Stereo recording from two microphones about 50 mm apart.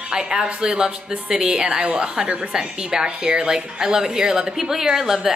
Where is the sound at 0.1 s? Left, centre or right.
Centre.